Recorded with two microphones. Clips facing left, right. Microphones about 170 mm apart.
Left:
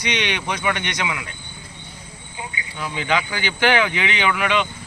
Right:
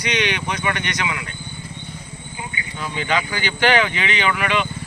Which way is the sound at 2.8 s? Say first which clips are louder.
Even; 15° left (ahead or behind).